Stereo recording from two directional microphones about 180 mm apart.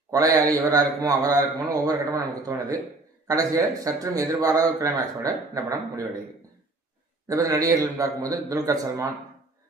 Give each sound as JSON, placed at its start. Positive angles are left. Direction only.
{"t": 0.1, "sound": "a man's voice", "side_deg": -20}
{"t": 7.3, "sound": "a man's voice", "side_deg": -20}